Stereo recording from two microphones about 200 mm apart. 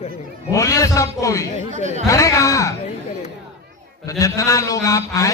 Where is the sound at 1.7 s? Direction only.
35° right (ahead or behind).